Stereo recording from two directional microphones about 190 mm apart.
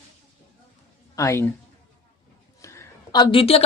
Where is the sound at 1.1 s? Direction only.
15° left (ahead or behind).